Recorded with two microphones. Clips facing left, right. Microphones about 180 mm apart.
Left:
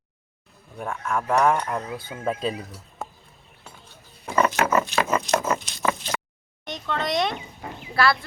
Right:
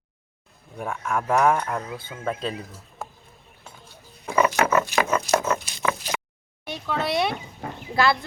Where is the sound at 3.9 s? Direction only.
10° right (ahead or behind).